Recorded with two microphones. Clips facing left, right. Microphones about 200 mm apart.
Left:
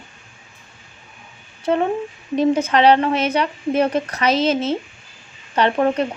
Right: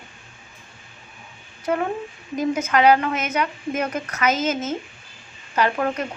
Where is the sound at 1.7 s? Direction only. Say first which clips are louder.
Left 5 dB; 25° left (ahead or behind).